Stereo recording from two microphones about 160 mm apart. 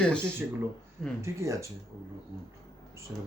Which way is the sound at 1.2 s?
20° right (ahead or behind).